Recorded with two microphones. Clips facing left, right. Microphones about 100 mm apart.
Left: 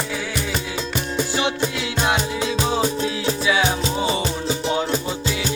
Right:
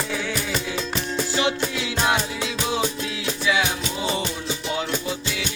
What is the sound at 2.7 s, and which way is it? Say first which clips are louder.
Music: left 4 dB; 35° left (ahead or behind).